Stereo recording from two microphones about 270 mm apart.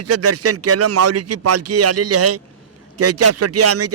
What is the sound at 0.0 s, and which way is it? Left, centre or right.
A man's voice, right.